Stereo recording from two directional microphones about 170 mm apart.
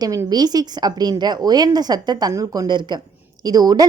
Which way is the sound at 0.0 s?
20° right (ahead or behind).